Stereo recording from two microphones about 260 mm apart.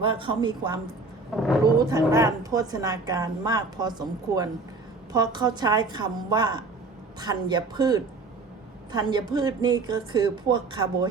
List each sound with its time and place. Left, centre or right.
0.0 s a woman's voice: centre
1.3 s roaring cats: centre
1.8 s a woman's voice: centre